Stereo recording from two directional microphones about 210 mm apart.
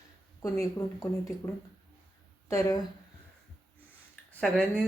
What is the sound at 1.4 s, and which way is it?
Speech, 15° left (ahead or behind).